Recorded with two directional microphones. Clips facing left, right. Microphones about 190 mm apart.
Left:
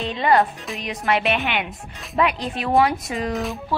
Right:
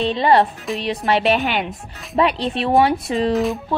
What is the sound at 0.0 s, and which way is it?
A woman's voice, 30° right (ahead or behind).